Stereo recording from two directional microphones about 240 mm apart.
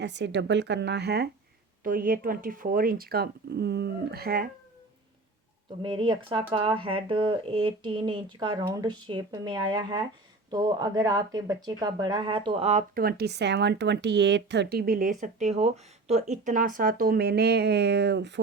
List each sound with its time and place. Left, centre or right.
0.0 s speech: right
5.8 s speech: centre; by 18.3 s right